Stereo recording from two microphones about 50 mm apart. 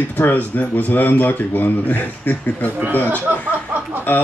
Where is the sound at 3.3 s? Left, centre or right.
Right.